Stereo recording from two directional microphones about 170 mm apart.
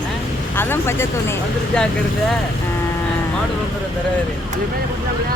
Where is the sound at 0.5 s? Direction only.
15° left (ahead or behind).